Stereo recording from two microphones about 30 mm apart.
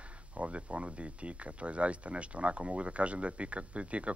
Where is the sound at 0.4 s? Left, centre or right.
Right.